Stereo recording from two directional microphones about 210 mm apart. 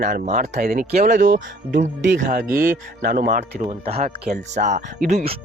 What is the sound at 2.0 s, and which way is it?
Speech, 50° right (ahead or behind).